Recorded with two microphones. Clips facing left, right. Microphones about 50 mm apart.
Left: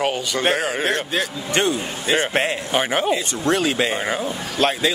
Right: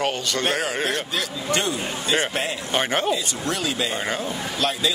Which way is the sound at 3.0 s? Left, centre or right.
Left.